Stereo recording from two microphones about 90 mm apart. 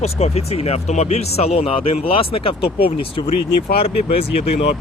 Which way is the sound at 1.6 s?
90° left.